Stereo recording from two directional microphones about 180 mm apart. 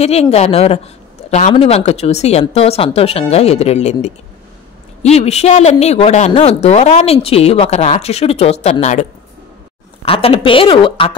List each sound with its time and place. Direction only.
0.0 s a woman's voice: 35° left (ahead or behind)
10.0 s a woman's voice: 30° left (ahead or behind)